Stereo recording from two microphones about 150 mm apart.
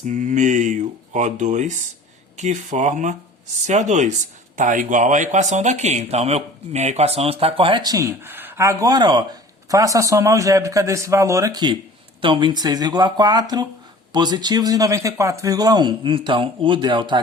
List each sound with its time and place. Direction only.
0.0 s a man's voice: 60° right (ahead or behind); by 17.2 s 30° right (ahead or behind)